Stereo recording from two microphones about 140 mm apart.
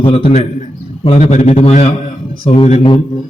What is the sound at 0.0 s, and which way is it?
A man's voice, 40° left (ahead or behind).